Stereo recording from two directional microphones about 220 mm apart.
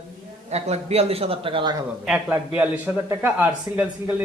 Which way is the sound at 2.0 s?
5° right (ahead or behind).